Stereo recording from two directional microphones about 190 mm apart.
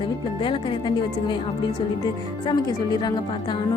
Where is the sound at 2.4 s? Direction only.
20° left (ahead or behind).